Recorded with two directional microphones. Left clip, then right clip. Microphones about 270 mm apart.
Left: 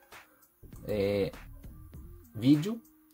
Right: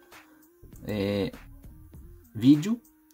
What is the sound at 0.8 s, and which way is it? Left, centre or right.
Speech, right.